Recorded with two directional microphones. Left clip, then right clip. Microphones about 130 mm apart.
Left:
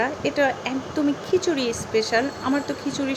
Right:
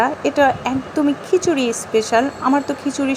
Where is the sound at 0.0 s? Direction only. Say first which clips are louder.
Right 6 dB; 30° right (ahead or behind).